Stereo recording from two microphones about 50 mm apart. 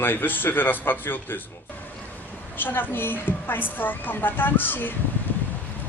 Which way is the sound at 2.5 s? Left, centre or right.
Left.